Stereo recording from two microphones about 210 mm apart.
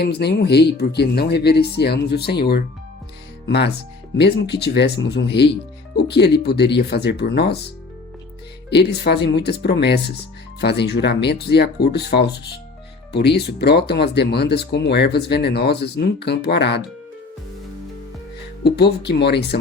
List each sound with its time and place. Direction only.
0.0 s speech: 50° left (ahead or behind)
4.2 s speech: 50° left (ahead or behind)
8.7 s speech: 50° left (ahead or behind)
18.6 s speech: 50° left (ahead or behind)